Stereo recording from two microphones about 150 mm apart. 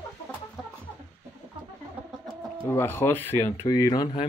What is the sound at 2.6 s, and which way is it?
Speech, 15° left (ahead or behind).